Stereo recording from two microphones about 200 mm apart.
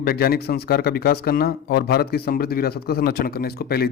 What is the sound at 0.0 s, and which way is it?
Speech, 50° left (ahead or behind).